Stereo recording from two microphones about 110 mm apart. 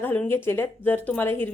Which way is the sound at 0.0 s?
15° left (ahead or behind).